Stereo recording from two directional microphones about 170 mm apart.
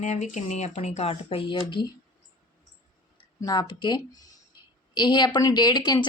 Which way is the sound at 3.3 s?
20° left (ahead or behind).